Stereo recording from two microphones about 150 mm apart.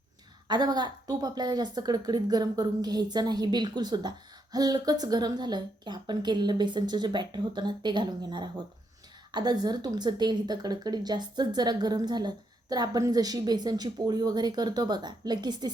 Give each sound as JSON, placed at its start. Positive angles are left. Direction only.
{"t": 0.4, "sound": "speech", "side_deg": -25}